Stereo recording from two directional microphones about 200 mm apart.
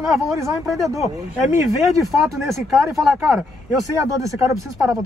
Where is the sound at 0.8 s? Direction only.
15° right (ahead or behind).